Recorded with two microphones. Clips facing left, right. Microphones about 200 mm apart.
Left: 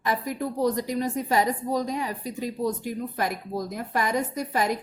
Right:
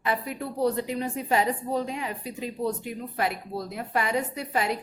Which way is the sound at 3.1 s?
40° left (ahead or behind).